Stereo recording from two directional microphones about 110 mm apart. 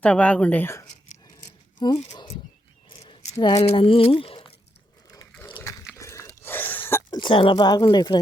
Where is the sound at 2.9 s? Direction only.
65° left (ahead or behind).